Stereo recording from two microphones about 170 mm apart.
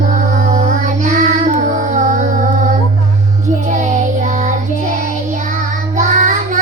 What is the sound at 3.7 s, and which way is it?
Child singing, 45° right (ahead or behind).